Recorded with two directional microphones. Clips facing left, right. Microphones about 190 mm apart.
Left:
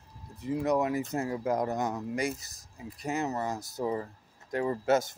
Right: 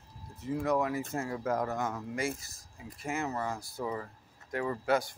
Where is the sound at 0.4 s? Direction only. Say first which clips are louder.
Left 2 dB; 20° left (ahead or behind).